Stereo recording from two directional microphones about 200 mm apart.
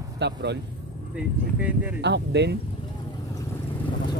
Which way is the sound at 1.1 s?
5° right (ahead or behind).